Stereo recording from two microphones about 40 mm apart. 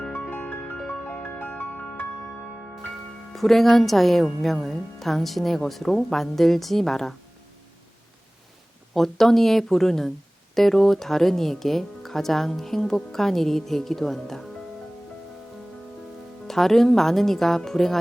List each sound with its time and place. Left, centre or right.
0.1 s music: left
0.9 s music: left
1.2 s music: left
3.3 s speech: centre
9.0 s speech: centre
16.5 s speech: centre